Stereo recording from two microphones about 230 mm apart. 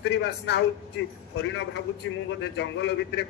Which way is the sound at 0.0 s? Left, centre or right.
Left.